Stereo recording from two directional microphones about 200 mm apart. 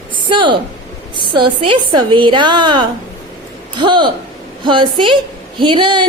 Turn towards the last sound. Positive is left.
turn(degrees=-25)  # may be behind; listen again after turning